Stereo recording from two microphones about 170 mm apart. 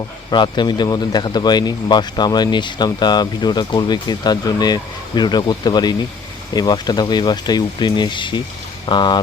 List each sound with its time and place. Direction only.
0.3 s speech: 25° left (ahead or behind)